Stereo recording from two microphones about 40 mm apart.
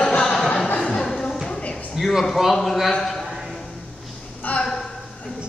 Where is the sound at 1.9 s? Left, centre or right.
Centre.